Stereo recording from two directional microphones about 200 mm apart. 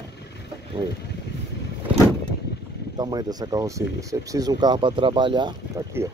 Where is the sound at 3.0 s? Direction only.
20° right (ahead or behind).